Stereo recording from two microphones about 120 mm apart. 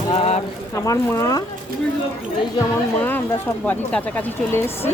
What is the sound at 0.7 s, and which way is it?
Speech, 25° left (ahead or behind).